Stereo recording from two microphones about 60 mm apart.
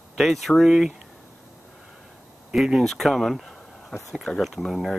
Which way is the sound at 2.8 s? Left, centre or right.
Centre.